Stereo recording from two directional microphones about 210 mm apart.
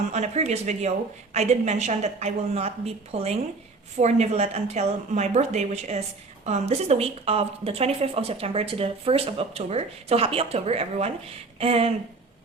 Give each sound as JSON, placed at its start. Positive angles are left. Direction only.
{"t": 0.1, "sound": "speech", "side_deg": -35}